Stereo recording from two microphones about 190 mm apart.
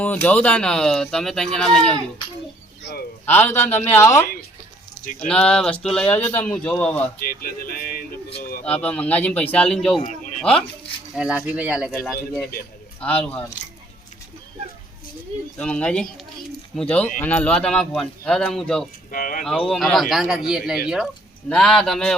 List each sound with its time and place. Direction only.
0.0 s speech: 10° left (ahead or behind)
3.2 s speech: 10° left (ahead or behind)
5.3 s speech: 5° left (ahead or behind)
7.2 s music: 50° left (ahead or behind)
8.4 s speech: 50° left (ahead or behind)
8.6 s speech: 5° left (ahead or behind)
10.0 s a sound: 40° left (ahead or behind)
11.1 s speech: 5° right (ahead or behind)
15.5 s speech: 5° left (ahead or behind)
19.1 s music: 45° left (ahead or behind)
19.5 s speech: 5° left (ahead or behind)